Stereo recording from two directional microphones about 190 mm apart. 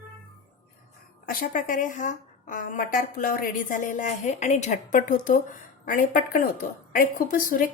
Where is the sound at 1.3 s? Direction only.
50° left (ahead or behind).